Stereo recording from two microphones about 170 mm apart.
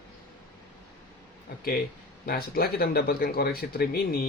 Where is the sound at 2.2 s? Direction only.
65° left (ahead or behind).